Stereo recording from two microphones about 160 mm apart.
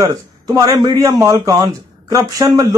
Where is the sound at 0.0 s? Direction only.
20° right (ahead or behind).